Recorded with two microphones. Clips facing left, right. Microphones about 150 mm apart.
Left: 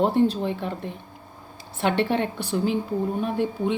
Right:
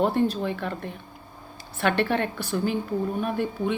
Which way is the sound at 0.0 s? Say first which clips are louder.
Left 2 dB; 20° left (ahead or behind).